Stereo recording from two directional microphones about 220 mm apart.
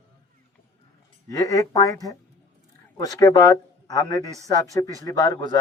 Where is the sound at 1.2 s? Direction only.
15° left (ahead or behind).